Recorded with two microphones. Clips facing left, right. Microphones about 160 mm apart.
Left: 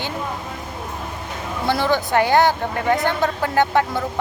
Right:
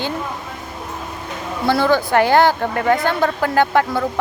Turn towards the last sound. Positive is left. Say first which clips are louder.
# right 2 dB
turn(degrees=20)  # may be behind; listen again after turning